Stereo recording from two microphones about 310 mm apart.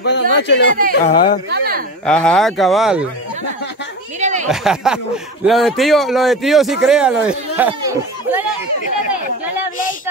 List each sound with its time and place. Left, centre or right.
0.0 s speech: left
1.0 s speech: centre
1.5 s speech: right
2.0 s speech: centre
4.2 s a sound: right
4.5 s speech: centre